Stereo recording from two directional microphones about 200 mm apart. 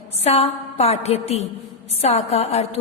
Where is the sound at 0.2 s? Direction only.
30° left (ahead or behind).